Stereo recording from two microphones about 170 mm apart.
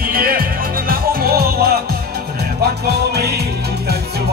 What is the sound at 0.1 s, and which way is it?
Music, 60° right (ahead or behind).